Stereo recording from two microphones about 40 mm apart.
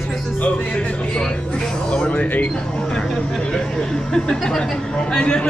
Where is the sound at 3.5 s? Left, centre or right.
Centre.